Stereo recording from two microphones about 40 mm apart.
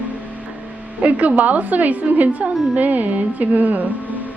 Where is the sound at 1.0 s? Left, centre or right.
Right.